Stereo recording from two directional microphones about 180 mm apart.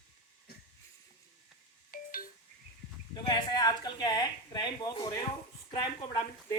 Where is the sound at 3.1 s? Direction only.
25° left (ahead or behind).